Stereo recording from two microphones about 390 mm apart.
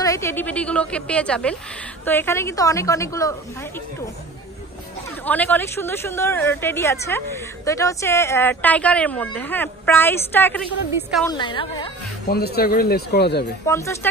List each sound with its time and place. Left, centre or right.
0.0 s a woman's voice: centre
5.2 s a woman's voice: centre
12.3 s speech: left
13.7 s a woman's voice: centre